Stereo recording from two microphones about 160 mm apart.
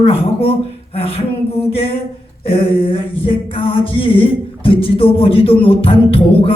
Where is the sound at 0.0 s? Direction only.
35° left (ahead or behind).